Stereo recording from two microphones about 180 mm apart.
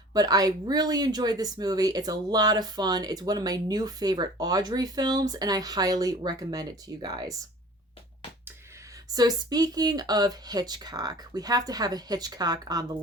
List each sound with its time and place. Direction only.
0.1 s speech: 20° right (ahead or behind)
9.0 s speech: 20° right (ahead or behind)